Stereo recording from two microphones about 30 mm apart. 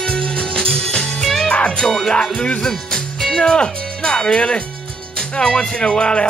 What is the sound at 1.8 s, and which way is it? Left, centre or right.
Music, left.